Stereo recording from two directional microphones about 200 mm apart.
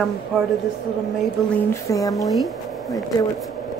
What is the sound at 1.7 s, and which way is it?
Speech, 15° left (ahead or behind).